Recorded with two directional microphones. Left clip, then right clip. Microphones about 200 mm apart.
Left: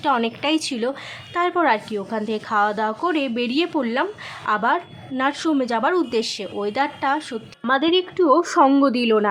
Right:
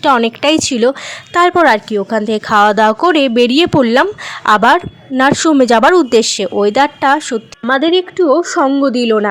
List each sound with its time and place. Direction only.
0.0 s a woman's voice: 35° right (ahead or behind)
7.6 s a woman's voice: 25° right (ahead or behind)